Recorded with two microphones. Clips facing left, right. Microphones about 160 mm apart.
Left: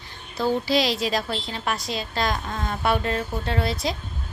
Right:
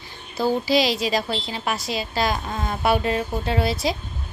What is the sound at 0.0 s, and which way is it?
Speech, 5° right (ahead or behind).